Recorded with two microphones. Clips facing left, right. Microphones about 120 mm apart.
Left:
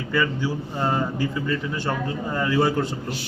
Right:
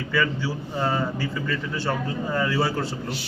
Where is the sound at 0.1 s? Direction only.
15° left (ahead or behind).